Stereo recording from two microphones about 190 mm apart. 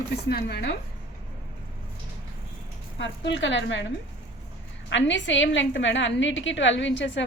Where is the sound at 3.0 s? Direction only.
70° left (ahead or behind).